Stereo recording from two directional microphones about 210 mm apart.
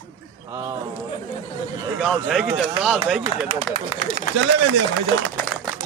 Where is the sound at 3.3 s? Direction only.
25° left (ahead or behind).